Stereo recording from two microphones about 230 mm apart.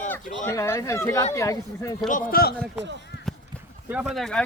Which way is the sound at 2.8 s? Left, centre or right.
Right.